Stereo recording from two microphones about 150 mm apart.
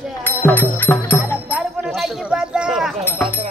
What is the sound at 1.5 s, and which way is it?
Speech, 5° right (ahead or behind).